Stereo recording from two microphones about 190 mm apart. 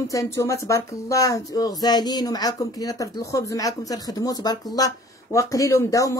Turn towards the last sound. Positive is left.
turn(degrees=15)  # may be behind; listen again after turning